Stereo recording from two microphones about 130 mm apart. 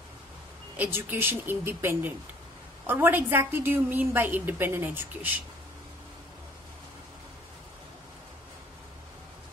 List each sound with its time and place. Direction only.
0.7 s a woman's voice: 15° right (ahead or behind)